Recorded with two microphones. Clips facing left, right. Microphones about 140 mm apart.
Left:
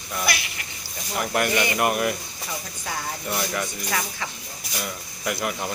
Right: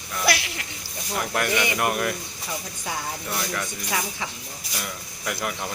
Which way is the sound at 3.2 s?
10° left (ahead or behind).